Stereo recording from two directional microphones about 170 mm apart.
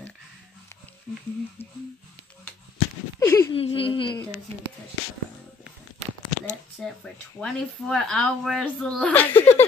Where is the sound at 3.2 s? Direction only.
20° left (ahead or behind).